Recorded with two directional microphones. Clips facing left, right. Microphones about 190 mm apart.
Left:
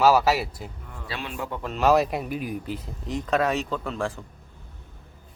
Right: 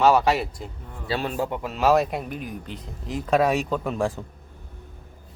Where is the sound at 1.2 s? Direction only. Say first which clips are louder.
Right 6 dB; 40° right (ahead or behind).